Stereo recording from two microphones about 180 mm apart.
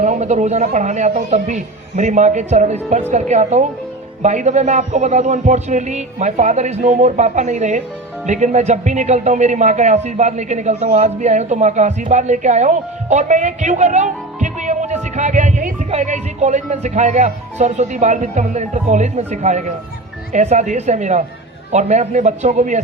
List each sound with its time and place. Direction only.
0.0 s a man's voice: 40° right (ahead or behind)